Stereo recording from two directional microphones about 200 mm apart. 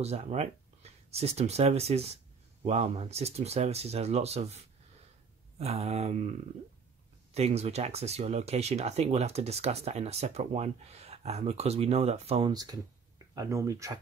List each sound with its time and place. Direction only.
0.0 s speech: 35° right (ahead or behind)
7.3 s speech: 30° right (ahead or behind); by 13.9 s 15° right (ahead or behind)